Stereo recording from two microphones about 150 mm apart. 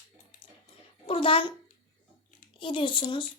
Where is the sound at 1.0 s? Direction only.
35° left (ahead or behind).